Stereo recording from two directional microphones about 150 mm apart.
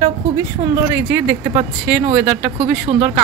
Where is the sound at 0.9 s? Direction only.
15° right (ahead or behind).